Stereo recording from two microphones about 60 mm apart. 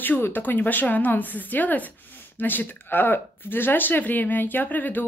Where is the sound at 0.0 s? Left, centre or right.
Left.